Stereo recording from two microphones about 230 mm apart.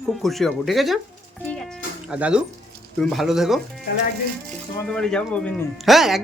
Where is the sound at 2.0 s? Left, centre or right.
Centre.